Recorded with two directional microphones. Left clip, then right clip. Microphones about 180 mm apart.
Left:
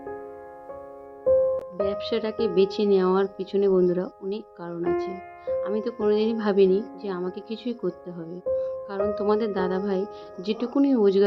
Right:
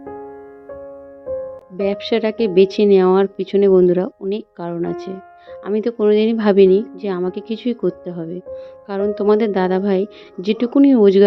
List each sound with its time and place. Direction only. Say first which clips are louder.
1.7 s a woman's voice: right 7 dB; 40° right (ahead or behind)